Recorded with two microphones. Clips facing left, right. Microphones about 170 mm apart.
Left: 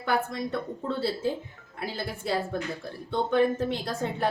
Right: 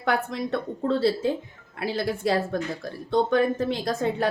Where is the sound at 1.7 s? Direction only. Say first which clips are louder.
Right 7 dB; 80° right.